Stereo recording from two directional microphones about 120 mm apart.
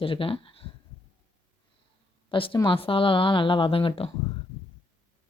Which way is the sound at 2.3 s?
45° left (ahead or behind).